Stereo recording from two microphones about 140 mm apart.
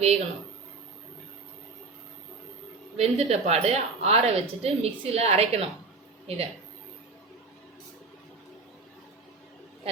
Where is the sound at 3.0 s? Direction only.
50° right (ahead or behind).